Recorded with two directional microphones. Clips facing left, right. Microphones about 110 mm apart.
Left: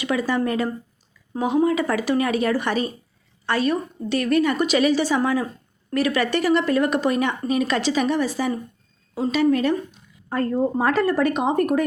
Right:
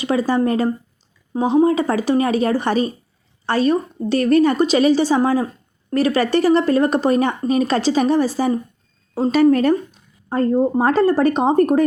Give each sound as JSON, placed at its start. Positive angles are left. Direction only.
{"t": 0.0, "sound": "a woman's voice", "side_deg": -35}
{"t": 10.2, "sound": "speech", "side_deg": -25}